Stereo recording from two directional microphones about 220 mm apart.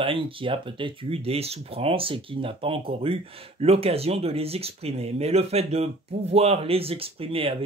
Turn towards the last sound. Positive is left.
turn(degrees=-25)  # may be behind; listen again after turning